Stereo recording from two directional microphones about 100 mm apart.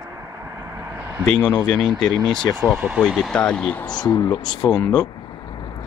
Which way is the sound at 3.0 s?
5° left (ahead or behind).